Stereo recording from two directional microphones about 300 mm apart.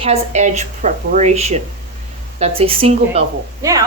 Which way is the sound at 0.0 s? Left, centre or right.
Right.